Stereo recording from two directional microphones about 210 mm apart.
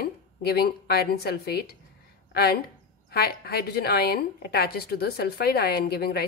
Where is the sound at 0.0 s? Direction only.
50° left (ahead or behind).